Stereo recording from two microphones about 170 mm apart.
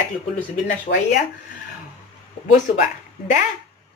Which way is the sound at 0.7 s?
55° left (ahead or behind).